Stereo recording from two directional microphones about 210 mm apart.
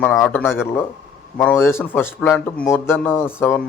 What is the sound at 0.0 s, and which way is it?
A man's voice, 5° left (ahead or behind).